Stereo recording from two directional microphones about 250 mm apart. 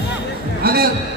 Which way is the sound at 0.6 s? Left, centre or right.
Right.